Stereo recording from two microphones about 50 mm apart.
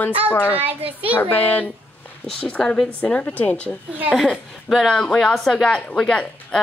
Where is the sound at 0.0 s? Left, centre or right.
Left.